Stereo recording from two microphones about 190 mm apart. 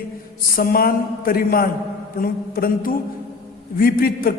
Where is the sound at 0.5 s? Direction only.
50° left (ahead or behind).